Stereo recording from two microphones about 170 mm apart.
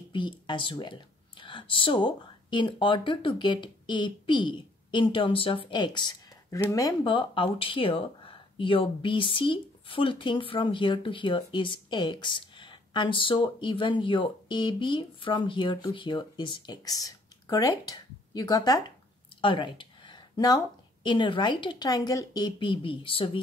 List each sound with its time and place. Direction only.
0.1 s a woman's voice: 30° left (ahead or behind)